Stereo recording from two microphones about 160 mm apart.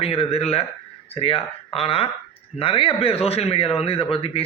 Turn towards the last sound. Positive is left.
turn(degrees=35)  # may be behind; listen again after turning